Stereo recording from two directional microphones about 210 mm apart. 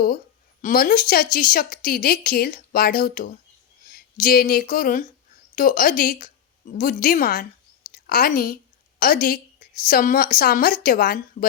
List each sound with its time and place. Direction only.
0.6 s a woman's voice: 40° left (ahead or behind)